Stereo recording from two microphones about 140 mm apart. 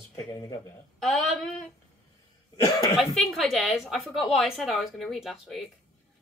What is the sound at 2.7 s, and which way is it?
Speech, 25° left (ahead or behind).